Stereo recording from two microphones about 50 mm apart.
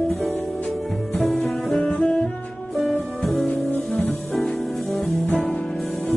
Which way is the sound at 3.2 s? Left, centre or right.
Centre.